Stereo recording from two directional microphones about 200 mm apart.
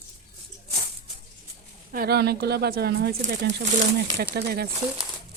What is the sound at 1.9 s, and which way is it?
Speech, 50° right (ahead or behind).